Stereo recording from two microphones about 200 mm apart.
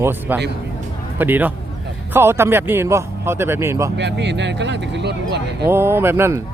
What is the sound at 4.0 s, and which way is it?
Speech, 60° right (ahead or behind).